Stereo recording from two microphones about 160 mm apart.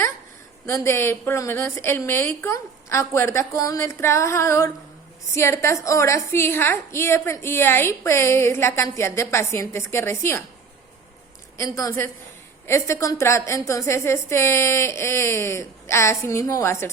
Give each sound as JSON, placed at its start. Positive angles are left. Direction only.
{"t": 0.6, "sound": "a woman's voice", "side_deg": 15}
{"t": 11.5, "sound": "a woman's voice", "side_deg": 20}